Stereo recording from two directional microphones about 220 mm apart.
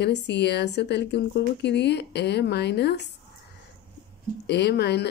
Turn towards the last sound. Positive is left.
turn(degrees=50)  # may be behind; listen again after turning